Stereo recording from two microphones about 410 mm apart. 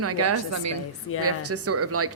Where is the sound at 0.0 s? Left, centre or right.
Right.